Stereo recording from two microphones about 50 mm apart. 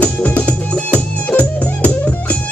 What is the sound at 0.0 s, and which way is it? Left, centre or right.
Music, left.